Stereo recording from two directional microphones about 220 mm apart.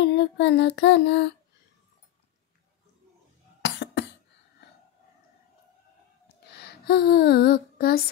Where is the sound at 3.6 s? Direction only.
50° left (ahead or behind).